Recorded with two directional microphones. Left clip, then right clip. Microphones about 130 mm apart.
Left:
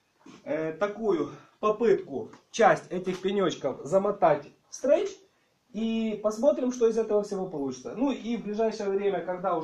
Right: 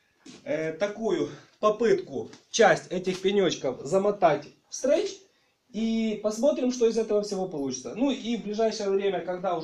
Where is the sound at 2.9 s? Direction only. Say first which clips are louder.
Right 3 dB; 10° right (ahead or behind).